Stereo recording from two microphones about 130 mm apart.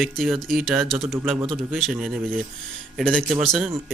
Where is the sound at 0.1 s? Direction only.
Centre (ahead or behind).